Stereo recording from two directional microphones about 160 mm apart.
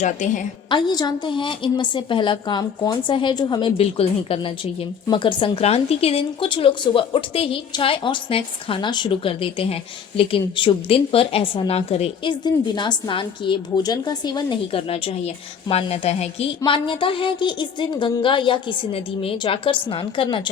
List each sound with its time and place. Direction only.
0.0 s a woman's voice: 50° left (ahead or behind)
0.7 s a woman's voice: 25° left (ahead or behind)
3.8 s a woman's voice: 35° left (ahead or behind)